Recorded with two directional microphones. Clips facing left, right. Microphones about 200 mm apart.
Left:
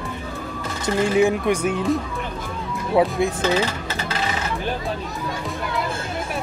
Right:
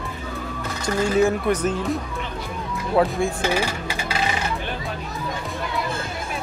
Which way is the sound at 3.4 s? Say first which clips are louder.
Left 2 dB; 10° right (ahead or behind).